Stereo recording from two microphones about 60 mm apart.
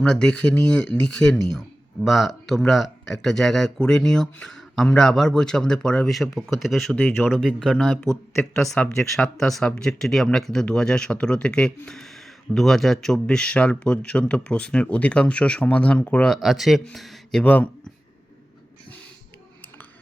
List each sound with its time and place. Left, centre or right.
0.0 s speech: centre
4.4 s a sound: centre
4.9 s speech: centre
6.1 s speech: centre
7.3 s speech: centre
7.8 s speech: centre
8.6 s speech: left
9.0 s speech: centre
9.6 s speech: centre
10.0 s speech: centre
16.3 s speech: centre
17.4 s speech: left